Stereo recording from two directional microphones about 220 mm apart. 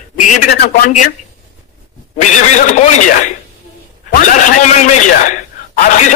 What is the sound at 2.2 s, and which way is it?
Speech, 35° left (ahead or behind).